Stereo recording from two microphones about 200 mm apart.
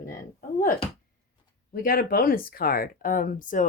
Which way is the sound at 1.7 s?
45° left (ahead or behind).